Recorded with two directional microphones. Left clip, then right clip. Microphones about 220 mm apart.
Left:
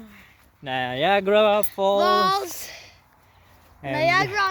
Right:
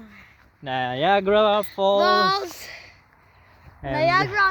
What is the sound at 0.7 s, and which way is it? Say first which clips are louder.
Speech: right 1 dB; 15° right (ahead or behind).